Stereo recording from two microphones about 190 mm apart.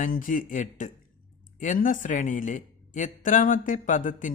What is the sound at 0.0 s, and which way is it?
Speech, 45° left (ahead or behind).